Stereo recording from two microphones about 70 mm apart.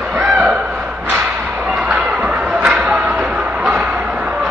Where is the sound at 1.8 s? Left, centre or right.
Centre.